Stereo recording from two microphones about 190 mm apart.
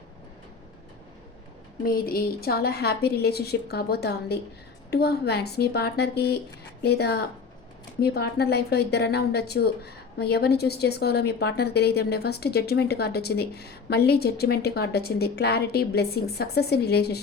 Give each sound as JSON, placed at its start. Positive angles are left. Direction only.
{"t": 1.8, "sound": "a woman's voice", "side_deg": 50}